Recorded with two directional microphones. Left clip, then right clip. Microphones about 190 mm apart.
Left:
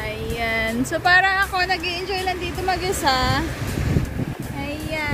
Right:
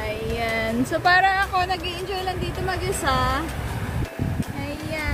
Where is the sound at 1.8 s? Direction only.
45° right (ahead or behind).